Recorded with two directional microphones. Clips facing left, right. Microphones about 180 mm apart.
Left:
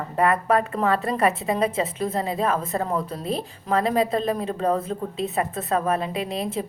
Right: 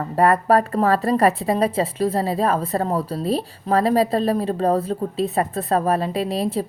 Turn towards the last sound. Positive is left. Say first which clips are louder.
# right 5 dB
turn(degrees=-35)  # may be behind; listen again after turning